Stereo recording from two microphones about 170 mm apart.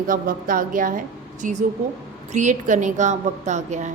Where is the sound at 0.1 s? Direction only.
55° right (ahead or behind).